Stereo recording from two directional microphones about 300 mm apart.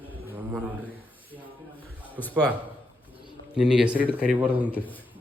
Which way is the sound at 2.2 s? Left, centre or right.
Centre.